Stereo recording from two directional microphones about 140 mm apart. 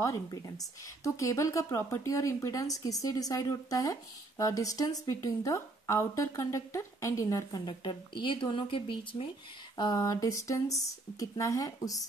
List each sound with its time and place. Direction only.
0.0 s a woman's voice: 25° left (ahead or behind)
9.8 s a woman's voice: 25° left (ahead or behind)